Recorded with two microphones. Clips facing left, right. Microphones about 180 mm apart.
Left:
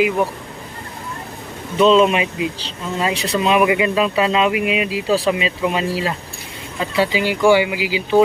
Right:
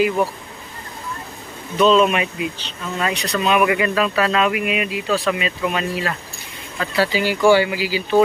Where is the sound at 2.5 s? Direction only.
30° left (ahead or behind).